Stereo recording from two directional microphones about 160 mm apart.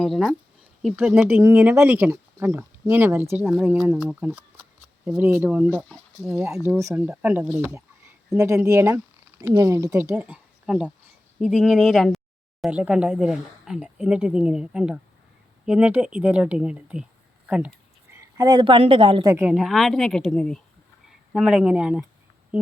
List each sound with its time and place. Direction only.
0.0 s speech: centre (ahead or behind)
3.4 s speech: 5° right (ahead or behind)
18.1 s a woman's voice: 20° right (ahead or behind)
19.3 s speech: 10° right (ahead or behind)
22.5 s a sound: 10° right (ahead or behind)